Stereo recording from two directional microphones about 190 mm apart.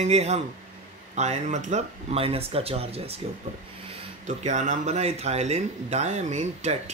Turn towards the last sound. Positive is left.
turn(degrees=-35)  # may be behind; listen again after turning